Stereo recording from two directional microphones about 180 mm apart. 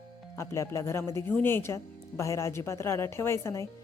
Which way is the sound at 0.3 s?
15° left (ahead or behind).